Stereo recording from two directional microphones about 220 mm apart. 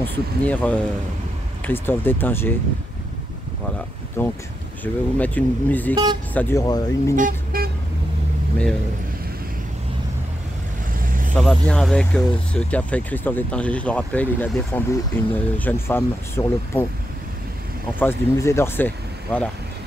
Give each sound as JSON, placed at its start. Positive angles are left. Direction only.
{"t": 0.0, "sound": "speech", "side_deg": 5}
{"t": 4.2, "sound": "speech", "side_deg": 10}
{"t": 7.2, "sound": "vehicle", "side_deg": -40}
{"t": 11.0, "sound": "vehicle", "side_deg": -40}
{"t": 11.3, "sound": "speech", "side_deg": 5}
{"t": 17.9, "sound": "speech", "side_deg": 10}